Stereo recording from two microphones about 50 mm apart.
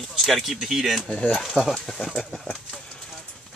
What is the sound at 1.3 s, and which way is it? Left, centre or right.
Speech, centre.